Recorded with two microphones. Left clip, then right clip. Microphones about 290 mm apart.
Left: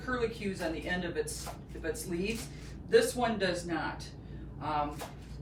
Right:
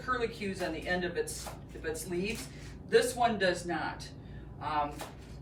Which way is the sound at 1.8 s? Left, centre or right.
Centre.